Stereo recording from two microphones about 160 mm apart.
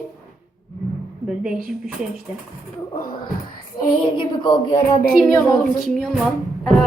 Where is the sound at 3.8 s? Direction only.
30° left (ahead or behind).